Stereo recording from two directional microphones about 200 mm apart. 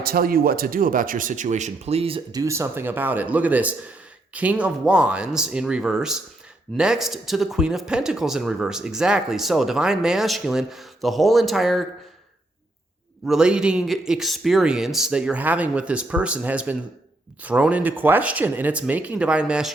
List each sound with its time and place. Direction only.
0.0 s speech: 45° right (ahead or behind); by 11.9 s centre (ahead or behind)
13.2 s speech: 5° right (ahead or behind)